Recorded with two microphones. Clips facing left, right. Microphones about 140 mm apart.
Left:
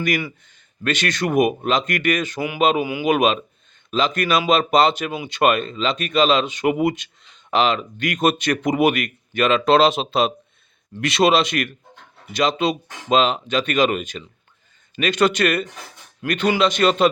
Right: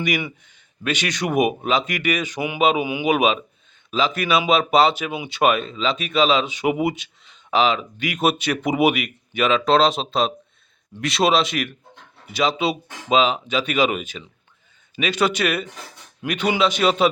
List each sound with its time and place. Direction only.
0.0 s speech: 15° right (ahead or behind)
2.8 s speech: 20° right (ahead or behind)
3.1 s speech: 5° right (ahead or behind)